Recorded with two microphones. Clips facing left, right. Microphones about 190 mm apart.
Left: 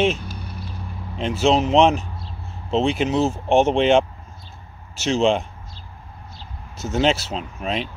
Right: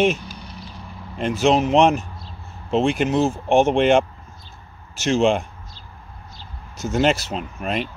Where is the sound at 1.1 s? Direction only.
Centre (ahead or behind).